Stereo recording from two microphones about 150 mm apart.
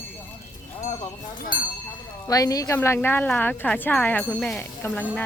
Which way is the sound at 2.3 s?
25° left (ahead or behind).